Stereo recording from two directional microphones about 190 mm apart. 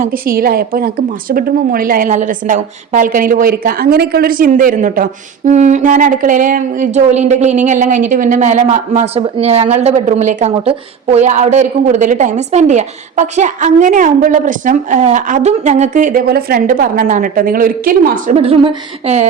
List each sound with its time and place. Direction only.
0.0 s a woman's voice: 50° right (ahead or behind)
18.3 s a woman's voice: 30° right (ahead or behind)